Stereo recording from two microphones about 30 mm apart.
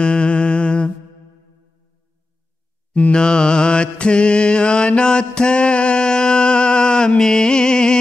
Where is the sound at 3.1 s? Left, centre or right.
Left.